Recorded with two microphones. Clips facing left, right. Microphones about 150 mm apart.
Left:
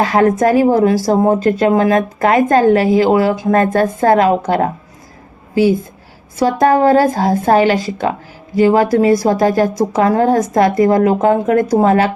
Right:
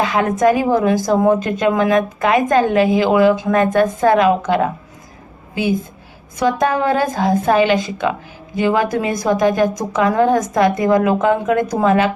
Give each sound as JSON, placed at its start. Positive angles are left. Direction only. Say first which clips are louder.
{"t": 0.0, "sound": "speech", "louder": "left 3 dB", "side_deg": 40}
{"t": 6.4, "sound": "speech", "louder": "left 5 dB", "side_deg": 35}